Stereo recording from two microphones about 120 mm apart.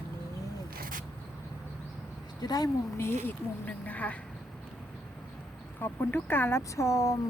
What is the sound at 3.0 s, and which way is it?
A woman's voice, 20° left (ahead or behind).